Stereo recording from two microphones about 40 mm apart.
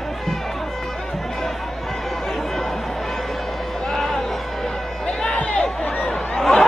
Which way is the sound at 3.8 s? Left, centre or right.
Centre.